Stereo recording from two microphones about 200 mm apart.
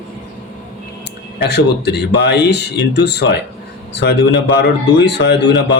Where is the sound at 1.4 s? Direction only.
55° left (ahead or behind).